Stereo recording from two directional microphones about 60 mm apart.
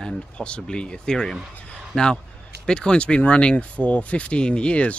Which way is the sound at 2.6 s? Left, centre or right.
Centre.